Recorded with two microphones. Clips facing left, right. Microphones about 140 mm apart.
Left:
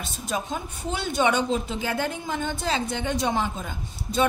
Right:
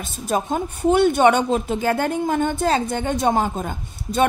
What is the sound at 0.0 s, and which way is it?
Speech, 50° right (ahead or behind).